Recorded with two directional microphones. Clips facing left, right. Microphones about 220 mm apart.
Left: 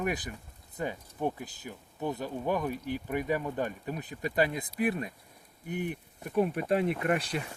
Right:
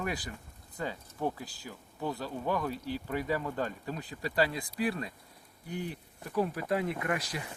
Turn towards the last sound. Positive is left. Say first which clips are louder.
# left 4 dB
turn(degrees=30)  # may be behind; listen again after turning